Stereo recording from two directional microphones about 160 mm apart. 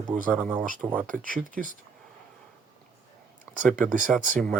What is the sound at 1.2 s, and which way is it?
Speech, 55° right (ahead or behind).